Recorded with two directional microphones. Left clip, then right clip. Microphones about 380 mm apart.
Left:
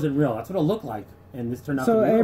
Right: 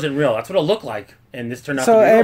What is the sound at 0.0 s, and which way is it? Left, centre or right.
Speech, right.